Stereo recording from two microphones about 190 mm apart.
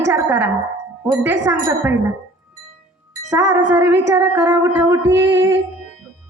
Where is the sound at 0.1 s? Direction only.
10° right (ahead or behind).